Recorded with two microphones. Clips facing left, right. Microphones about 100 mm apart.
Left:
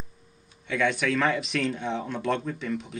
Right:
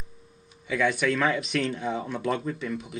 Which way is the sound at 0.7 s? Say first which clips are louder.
Right 1 dB; centre (ahead or behind).